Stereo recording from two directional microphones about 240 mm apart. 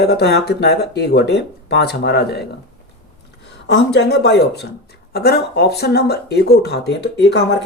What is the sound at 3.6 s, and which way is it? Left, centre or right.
Speech, left.